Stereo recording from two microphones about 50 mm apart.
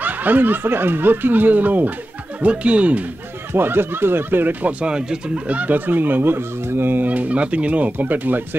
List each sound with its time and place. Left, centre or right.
0.0 s speech: right
2.4 s speech: right
3.5 s speech: right
4.6 s speech: centre
5.5 s speech: right
7.1 s speech: right